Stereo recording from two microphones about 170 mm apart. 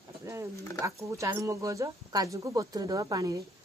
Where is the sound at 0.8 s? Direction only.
15° right (ahead or behind).